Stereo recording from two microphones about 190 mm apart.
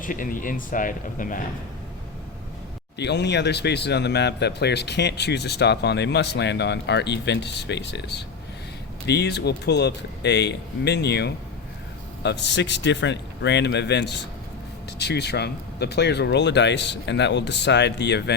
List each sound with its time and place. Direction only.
0.0 s speech: 45° left (ahead or behind)
3.0 s speech: 65° left (ahead or behind)